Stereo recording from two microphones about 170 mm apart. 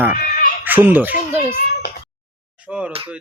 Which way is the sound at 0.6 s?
10° right (ahead or behind).